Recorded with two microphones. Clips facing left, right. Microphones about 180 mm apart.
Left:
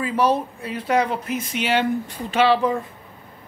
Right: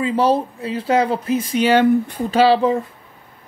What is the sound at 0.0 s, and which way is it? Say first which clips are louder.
Speech: right 3 dB; 30° right (ahead or behind).